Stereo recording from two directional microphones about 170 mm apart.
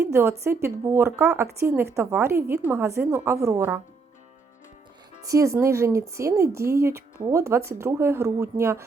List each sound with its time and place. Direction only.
0.0 s speech: 15° right (ahead or behind)
5.2 s speech: 20° right (ahead or behind)